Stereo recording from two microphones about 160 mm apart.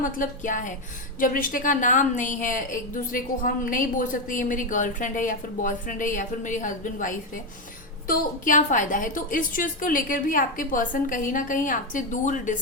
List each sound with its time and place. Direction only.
0.0 s a woman's voice: 55° left (ahead or behind)